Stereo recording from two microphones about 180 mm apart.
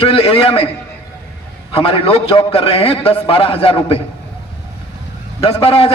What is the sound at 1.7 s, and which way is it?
A man's voice, 30° left (ahead or behind).